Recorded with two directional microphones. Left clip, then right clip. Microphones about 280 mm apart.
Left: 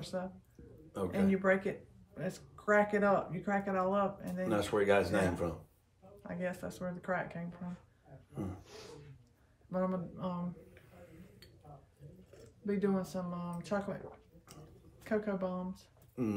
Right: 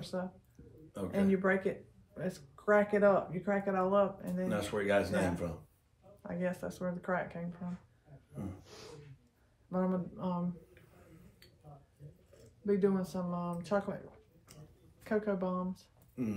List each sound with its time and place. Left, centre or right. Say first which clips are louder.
0.0 s a sound: even; centre
1.3 s speech: even; centre
4.5 s speech: left 3 dB; centre
6.2 s speech: right 2 dB; centre
9.7 s speech: even; centre
12.6 s speech: right 3 dB; centre
15.0 s speech: right 2 dB; centre
16.2 s speech: left 2 dB; centre